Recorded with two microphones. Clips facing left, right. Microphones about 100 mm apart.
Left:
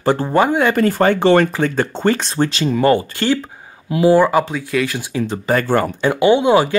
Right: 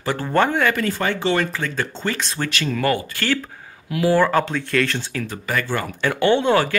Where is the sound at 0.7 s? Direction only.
40° left (ahead or behind).